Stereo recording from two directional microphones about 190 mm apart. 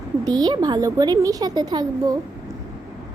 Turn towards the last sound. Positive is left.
turn(degrees=-20)  # may be behind; listen again after turning